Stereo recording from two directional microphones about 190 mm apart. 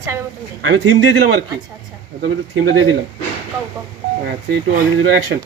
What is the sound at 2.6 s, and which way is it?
Speech, 90° right.